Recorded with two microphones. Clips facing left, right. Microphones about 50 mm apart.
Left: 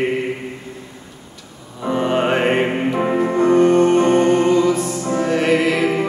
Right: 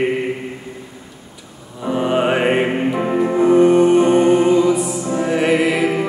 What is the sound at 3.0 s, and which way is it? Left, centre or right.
Music, centre.